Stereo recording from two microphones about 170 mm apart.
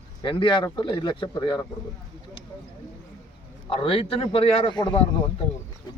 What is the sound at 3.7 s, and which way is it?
Speech, 30° left (ahead or behind).